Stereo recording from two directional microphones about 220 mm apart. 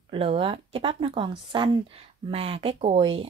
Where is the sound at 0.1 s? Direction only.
25° right (ahead or behind).